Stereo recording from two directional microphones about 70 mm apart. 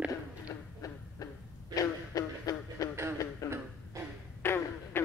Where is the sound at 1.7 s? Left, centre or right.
Left.